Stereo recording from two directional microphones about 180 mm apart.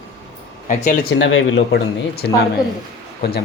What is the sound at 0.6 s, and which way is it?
Speech, 45° left (ahead or behind).